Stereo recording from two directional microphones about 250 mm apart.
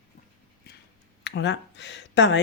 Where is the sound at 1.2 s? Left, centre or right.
Left.